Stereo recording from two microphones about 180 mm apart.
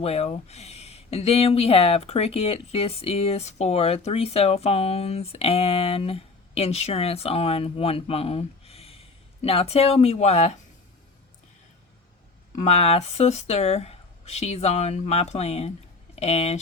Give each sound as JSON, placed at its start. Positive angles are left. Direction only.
{"t": 0.0, "sound": "speech", "side_deg": 35}
{"t": 12.6, "sound": "speech", "side_deg": 35}